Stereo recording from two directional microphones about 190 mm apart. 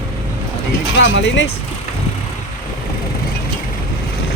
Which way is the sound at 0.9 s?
70° left (ahead or behind).